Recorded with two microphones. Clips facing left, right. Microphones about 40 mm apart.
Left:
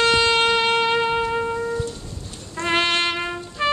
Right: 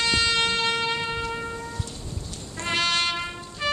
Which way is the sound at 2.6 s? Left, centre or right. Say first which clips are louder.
Left 4 dB; left.